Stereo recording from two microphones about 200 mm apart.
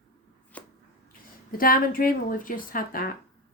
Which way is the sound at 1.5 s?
45° left (ahead or behind).